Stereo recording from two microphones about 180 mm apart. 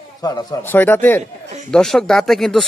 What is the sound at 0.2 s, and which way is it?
Speech, 20° left (ahead or behind).